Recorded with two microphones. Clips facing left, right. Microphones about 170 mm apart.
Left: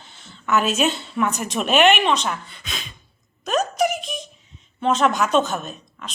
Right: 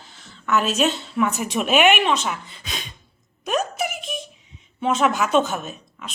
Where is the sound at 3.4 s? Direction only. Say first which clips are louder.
Left 3 dB; 5° right (ahead or behind).